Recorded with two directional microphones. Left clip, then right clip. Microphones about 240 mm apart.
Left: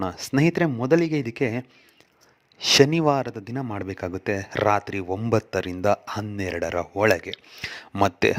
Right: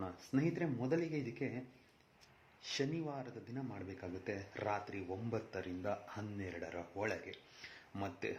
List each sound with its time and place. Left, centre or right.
0.0 s a man's voice: left